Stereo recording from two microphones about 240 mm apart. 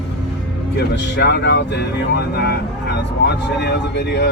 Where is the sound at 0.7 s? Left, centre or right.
Left.